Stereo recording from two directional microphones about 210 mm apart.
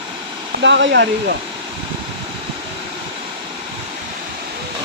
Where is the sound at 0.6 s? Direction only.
60° right (ahead or behind).